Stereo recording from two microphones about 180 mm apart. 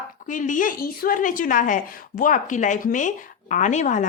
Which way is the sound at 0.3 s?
45° left (ahead or behind).